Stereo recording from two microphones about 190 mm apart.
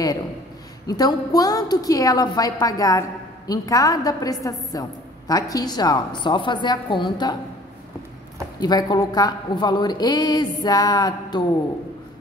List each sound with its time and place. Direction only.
0.8 s a woman's voice: 20° left (ahead or behind)
8.5 s a woman's voice: 20° left (ahead or behind)